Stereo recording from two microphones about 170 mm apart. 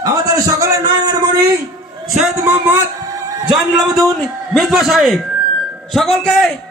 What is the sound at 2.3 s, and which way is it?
Speech, 15° right (ahead or behind).